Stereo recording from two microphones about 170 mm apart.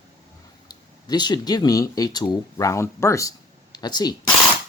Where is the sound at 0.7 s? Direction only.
25° left (ahead or behind).